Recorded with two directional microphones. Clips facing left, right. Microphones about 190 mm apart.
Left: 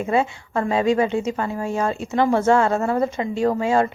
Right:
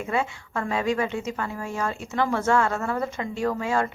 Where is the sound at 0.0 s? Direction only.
25° left (ahead or behind).